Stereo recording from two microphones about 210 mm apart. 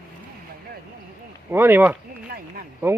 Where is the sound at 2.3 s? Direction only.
45° right (ahead or behind).